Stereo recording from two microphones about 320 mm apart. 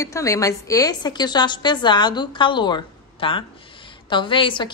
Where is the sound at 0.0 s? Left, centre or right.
Centre.